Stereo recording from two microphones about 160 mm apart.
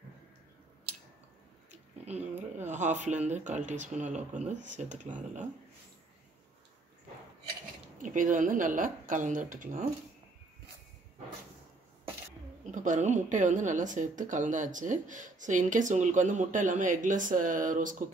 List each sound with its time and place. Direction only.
1.7 s a sound: 45° right (ahead or behind)
3.1 s a woman's voice: 45° right (ahead or behind)
8.0 s a woman's voice: 55° right (ahead or behind)
12.7 s a woman's voice: 50° right (ahead or behind)